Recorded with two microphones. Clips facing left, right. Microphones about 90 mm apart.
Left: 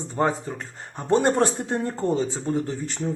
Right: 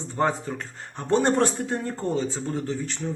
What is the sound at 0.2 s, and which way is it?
Speech, 10° left (ahead or behind).